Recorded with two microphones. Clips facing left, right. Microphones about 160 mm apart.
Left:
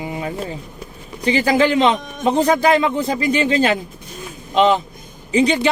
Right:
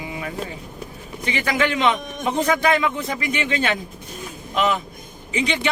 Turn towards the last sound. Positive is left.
turn(degrees=35)  # may be behind; listen again after turning